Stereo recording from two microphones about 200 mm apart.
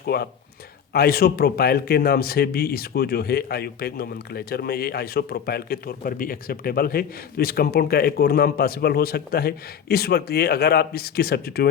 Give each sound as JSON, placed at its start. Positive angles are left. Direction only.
{"t": 0.0, "sound": "a man's voice", "side_deg": 50}